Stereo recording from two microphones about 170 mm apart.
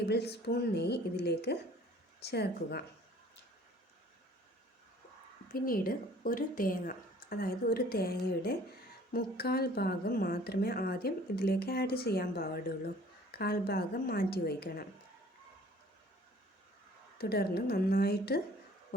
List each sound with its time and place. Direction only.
0.1 s speech: 75° left (ahead or behind)
5.5 s a woman's voice: 60° left (ahead or behind)
17.2 s speech: 70° left (ahead or behind)